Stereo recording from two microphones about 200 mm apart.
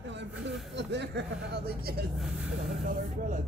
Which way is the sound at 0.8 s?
60° right (ahead or behind).